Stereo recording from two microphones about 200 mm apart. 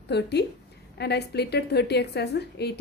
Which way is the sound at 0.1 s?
55° left (ahead or behind).